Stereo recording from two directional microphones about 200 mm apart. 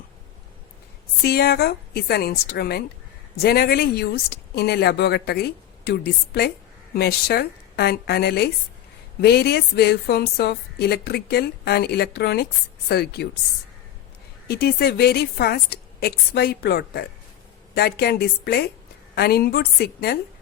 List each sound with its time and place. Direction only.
1.2 s a woman's voice: 50° left (ahead or behind)
14.4 s a woman's voice: 50° left (ahead or behind)